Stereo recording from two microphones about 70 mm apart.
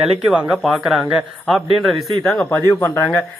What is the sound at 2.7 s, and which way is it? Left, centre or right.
Speech, left.